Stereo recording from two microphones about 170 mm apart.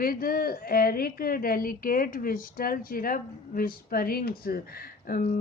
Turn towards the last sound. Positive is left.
turn(degrees=55)  # may be behind; listen again after turning